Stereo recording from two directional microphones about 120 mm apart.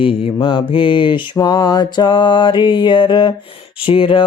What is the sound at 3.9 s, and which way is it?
Mantra, 45° left (ahead or behind).